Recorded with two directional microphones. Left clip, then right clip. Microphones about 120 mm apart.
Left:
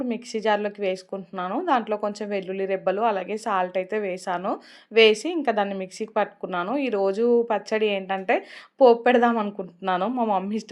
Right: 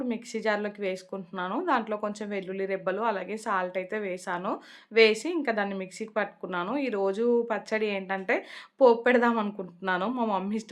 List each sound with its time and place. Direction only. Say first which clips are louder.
0.1 s a woman's voice: left 6 dB; 25° left (ahead or behind)